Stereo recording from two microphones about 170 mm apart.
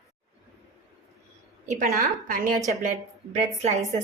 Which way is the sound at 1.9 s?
55° right (ahead or behind).